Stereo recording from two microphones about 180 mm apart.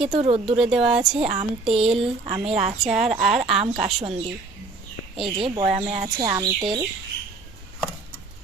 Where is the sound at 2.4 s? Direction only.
35° right (ahead or behind).